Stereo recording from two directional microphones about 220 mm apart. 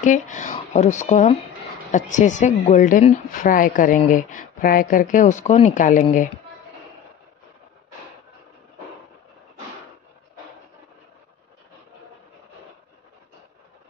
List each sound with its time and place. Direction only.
0.0 s a woman's voice: 35° left (ahead or behind)